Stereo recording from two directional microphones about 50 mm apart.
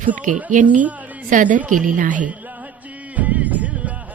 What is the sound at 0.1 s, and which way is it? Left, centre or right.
Speech, right.